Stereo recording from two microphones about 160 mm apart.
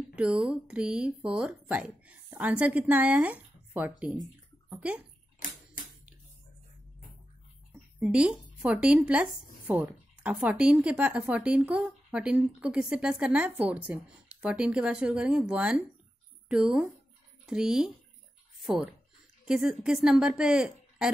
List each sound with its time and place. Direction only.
0.1 s speech: 5° right (ahead or behind)
4.6 s bathtub: 10° right (ahead or behind)
5.4 s a sound: 55° left (ahead or behind)
8.0 s a woman's voice: 5° right (ahead or behind)